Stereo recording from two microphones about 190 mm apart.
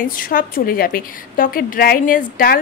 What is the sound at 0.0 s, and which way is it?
A woman's voice, 50° left (ahead or behind).